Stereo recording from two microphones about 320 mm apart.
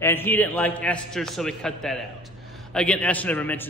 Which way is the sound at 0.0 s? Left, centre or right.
Centre.